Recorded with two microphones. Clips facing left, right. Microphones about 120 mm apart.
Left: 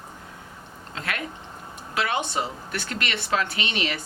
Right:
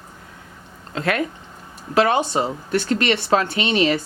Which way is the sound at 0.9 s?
45° right (ahead or behind).